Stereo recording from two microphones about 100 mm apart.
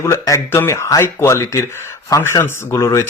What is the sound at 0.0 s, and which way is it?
A man's voice, 30° left (ahead or behind).